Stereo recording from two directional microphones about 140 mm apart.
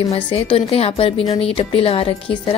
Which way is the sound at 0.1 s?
45° left (ahead or behind).